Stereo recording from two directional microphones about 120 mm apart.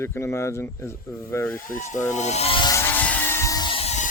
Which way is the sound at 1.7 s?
90° left.